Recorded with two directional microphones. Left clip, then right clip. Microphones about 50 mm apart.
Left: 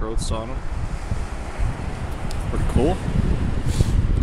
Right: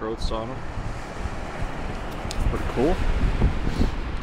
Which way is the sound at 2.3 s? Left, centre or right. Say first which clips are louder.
Left 1 dB; right.